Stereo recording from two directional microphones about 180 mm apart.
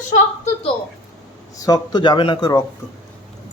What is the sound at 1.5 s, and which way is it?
Speech, 20° left (ahead or behind).